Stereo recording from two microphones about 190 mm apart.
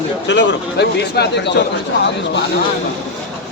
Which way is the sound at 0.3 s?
70° left (ahead or behind).